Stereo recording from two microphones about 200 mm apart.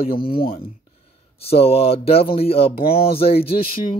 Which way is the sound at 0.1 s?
45° left (ahead or behind).